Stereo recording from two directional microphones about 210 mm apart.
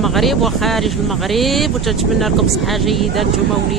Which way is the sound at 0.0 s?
Centre (ahead or behind).